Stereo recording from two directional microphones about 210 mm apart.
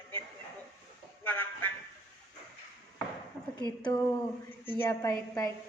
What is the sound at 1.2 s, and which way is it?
Vehicle, 10° left (ahead or behind).